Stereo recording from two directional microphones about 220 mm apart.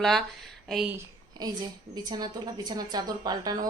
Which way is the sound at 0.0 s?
Centre (ahead or behind).